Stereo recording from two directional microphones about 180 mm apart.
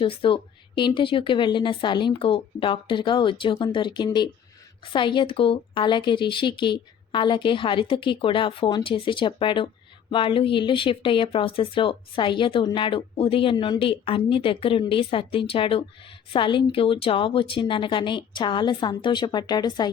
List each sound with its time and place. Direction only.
0.0 s speech: 30° left (ahead or behind)